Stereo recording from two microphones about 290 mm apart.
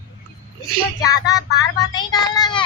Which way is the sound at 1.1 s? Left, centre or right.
Centre.